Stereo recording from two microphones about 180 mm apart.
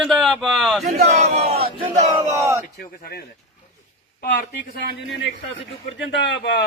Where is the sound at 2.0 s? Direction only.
15° right (ahead or behind).